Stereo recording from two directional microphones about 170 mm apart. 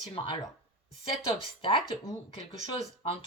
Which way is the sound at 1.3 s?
30° left (ahead or behind).